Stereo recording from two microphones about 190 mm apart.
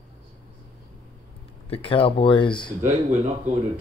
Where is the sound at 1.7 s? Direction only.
30° left (ahead or behind).